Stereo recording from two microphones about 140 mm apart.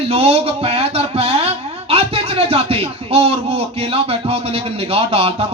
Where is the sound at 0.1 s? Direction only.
45° right (ahead or behind).